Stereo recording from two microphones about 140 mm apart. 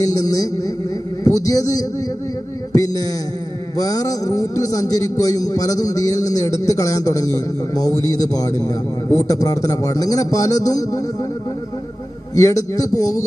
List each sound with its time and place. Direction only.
0.0 s a man's voice: 25° left (ahead or behind)
12.3 s a man's voice: 25° left (ahead or behind)